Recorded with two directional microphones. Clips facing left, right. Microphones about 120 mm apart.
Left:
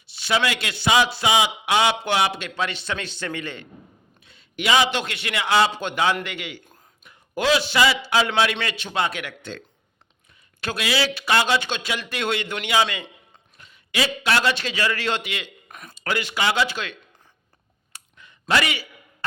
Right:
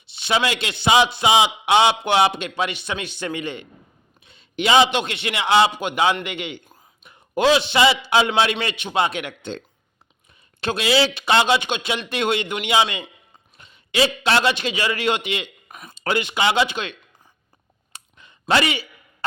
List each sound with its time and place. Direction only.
0.1 s a man's voice: 20° right (ahead or behind)
17.9 s clicking: 25° right (ahead or behind)